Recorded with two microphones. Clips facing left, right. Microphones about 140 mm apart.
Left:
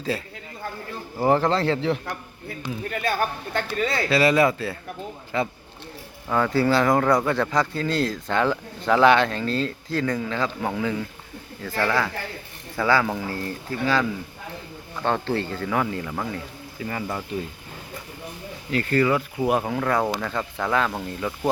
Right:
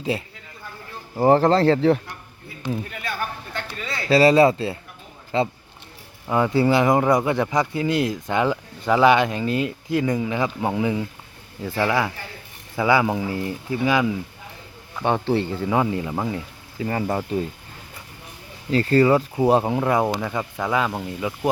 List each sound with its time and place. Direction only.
1.2 s speech: 35° right (ahead or behind)
3.0 s speech: 40° left (ahead or behind)
4.1 s speech: 35° right (ahead or behind)
16.8 s speech: 40° right (ahead or behind)
18.7 s speech: 35° right (ahead or behind); by 21.5 s 10° right (ahead or behind)